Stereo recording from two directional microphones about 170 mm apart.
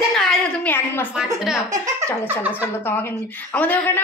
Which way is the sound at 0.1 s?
5° left (ahead or behind).